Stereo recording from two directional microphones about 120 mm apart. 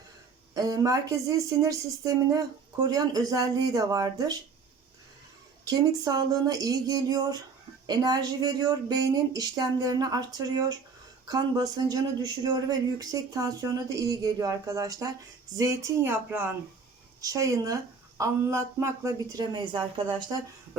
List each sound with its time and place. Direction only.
0.5 s speech: 30° right (ahead or behind)
5.6 s speech: 35° right (ahead or behind); by 16.6 s 15° right (ahead or behind)
17.2 s speech: 30° right (ahead or behind)